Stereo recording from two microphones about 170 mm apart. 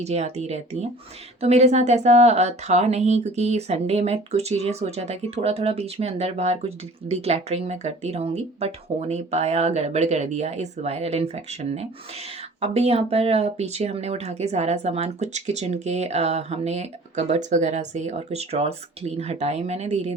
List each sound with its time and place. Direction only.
0.0 s speech: 40° right (ahead or behind)